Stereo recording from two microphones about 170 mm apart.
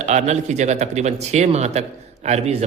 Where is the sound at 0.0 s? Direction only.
45° right (ahead or behind).